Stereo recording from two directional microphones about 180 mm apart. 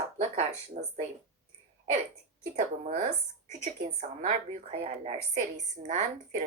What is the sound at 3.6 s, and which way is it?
A woman's voice, 40° right (ahead or behind).